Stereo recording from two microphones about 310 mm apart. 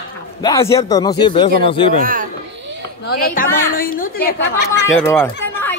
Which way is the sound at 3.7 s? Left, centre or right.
Left.